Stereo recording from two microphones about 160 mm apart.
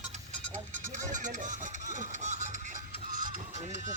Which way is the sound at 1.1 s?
50° right (ahead or behind).